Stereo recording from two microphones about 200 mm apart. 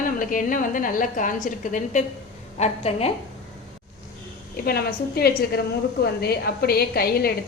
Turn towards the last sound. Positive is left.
turn(degrees=50)  # may be behind; listen again after turning